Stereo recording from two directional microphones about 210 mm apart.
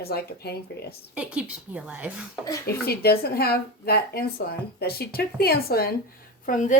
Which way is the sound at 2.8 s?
50° left (ahead or behind).